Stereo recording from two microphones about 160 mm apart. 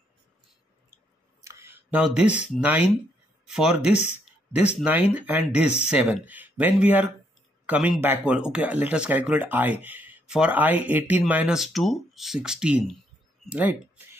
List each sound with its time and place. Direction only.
1.4 s a sound: 15° right (ahead or behind)
3.4 s speech: 5° right (ahead or behind)
5.6 s speech: 40° left (ahead or behind)
5.9 s speech: 10° right (ahead or behind)